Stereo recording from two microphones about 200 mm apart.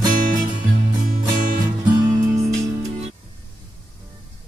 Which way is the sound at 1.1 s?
45° right (ahead or behind).